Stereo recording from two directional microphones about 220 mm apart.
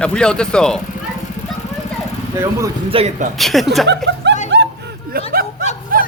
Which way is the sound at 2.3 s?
15° right (ahead or behind).